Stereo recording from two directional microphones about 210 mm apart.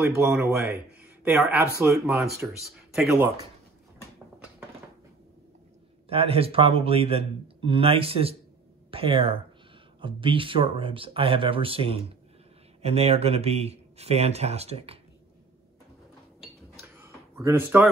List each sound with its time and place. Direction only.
0.0 s speech: 15° right (ahead or behind)
6.0 s a man's voice: 25° right (ahead or behind)
16.8 s a sound: 10° right (ahead or behind)